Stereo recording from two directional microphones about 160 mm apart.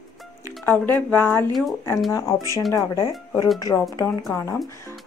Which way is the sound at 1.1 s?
10° left (ahead or behind).